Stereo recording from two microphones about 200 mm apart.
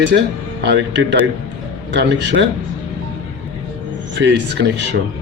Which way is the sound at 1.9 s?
60° right (ahead or behind).